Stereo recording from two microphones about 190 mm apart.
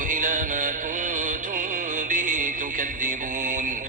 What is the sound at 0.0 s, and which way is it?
Music, 45° right (ahead or behind).